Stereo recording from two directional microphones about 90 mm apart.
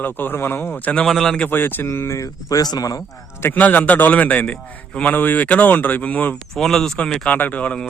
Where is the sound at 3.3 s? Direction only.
30° left (ahead or behind).